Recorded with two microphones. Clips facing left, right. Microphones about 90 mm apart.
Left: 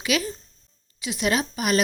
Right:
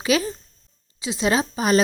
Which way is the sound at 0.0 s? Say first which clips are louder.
Right 4 dB; 30° right (ahead or behind).